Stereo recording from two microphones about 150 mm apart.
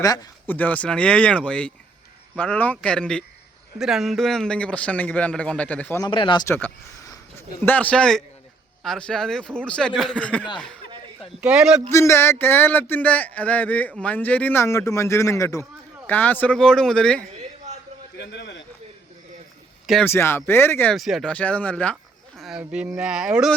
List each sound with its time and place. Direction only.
0.0 s a man's voice: 25° left (ahead or behind)
0.4 s speech: 10° left (ahead or behind)
6.0 s speech: 35° left (ahead or behind)
7.6 s a man's voice: 10° left (ahead or behind)
11.3 s a man's voice: 5° right (ahead or behind)
11.9 s a man's voice: 20° left (ahead or behind)
20.1 s speech: 15° left (ahead or behind)
20.9 s speech: centre (ahead or behind)
22.4 s a man's voice: 5° right (ahead or behind)